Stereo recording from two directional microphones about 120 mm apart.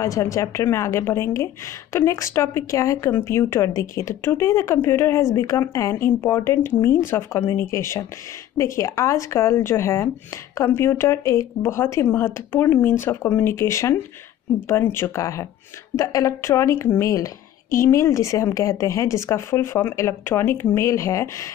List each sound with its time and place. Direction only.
0.0 s a woman's voice: 25° left (ahead or behind)